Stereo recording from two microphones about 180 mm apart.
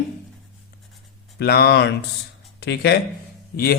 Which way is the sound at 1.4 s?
60° left (ahead or behind).